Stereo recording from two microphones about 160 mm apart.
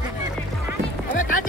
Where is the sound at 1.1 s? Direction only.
60° left (ahead or behind).